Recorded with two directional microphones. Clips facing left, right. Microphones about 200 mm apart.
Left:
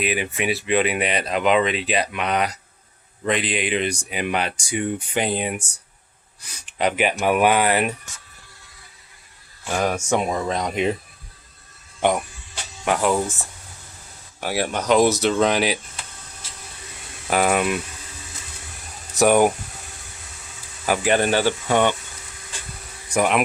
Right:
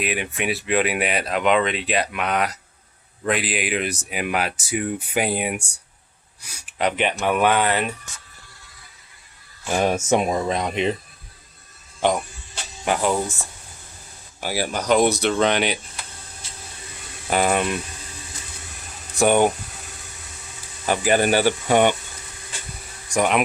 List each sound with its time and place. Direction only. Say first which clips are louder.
0.0 s speech: left 2 dB; centre (ahead or behind)
9.7 s speech: right 2 dB; 20° right (ahead or behind)
12.8 s speech: left 1 dB; centre (ahead or behind)
14.4 s speech: left 1 dB; centre (ahead or behind)
17.2 s speech: left 1 dB; centre (ahead or behind)
19.2 s speech: left 1 dB; 5° left (ahead or behind)
20.8 s speech: even; centre (ahead or behind); by 21.9 s 15° right (ahead or behind)
23.1 s speech: even; centre (ahead or behind)